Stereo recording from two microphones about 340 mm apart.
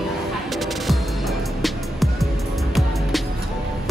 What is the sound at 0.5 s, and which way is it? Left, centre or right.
Music, centre.